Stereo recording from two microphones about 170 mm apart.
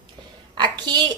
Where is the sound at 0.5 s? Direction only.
25° right (ahead or behind).